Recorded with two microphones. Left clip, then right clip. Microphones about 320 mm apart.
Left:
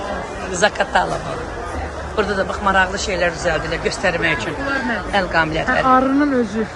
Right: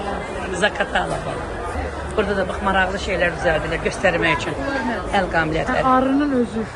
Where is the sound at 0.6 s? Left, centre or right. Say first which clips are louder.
Left 4 dB; centre.